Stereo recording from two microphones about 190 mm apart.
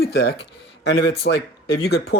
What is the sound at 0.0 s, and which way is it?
Speech, 60° left (ahead or behind).